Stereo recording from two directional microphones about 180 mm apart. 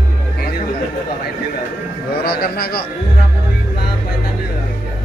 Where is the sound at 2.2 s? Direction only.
60° left (ahead or behind).